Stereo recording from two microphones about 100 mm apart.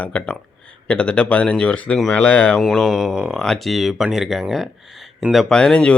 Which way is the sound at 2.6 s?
5° right (ahead or behind).